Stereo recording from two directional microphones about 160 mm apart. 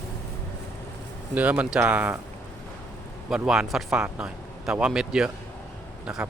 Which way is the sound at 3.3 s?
5° right (ahead or behind).